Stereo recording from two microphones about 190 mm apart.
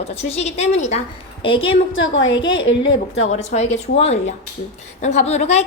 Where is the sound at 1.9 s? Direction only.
85° left.